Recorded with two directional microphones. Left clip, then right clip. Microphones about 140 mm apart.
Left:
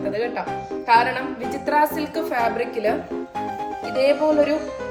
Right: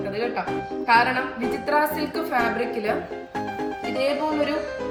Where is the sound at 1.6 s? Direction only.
40° left (ahead or behind).